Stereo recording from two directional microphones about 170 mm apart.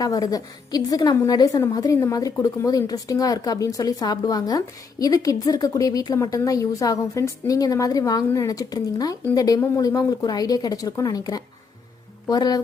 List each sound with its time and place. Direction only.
0.0 s a woman's voice: 20° left (ahead or behind)